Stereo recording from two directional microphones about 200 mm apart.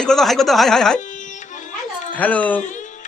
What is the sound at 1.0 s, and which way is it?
Music, 40° left (ahead or behind).